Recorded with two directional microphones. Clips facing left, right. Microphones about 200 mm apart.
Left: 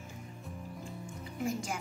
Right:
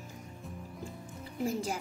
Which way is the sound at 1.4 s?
35° right (ahead or behind).